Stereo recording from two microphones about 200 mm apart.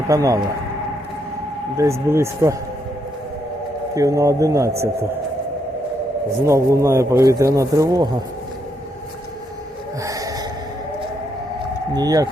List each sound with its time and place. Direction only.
0.1 s a man's voice: 15° right (ahead or behind)
1.7 s a man's voice: 15° right (ahead or behind)
3.9 s a man's voice: 15° right (ahead or behind)
6.4 s a man's voice: 15° right (ahead or behind)
10.0 s gasp: 15° right (ahead or behind)
11.9 s speech: 20° right (ahead or behind)